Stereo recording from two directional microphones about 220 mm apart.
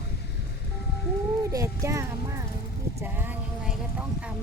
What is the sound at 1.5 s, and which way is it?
Speech, 15° right (ahead or behind).